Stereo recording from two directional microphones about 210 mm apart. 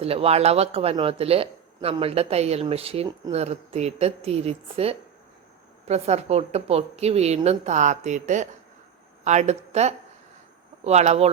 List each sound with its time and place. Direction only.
0.0 s a woman's voice: 30° right (ahead or behind)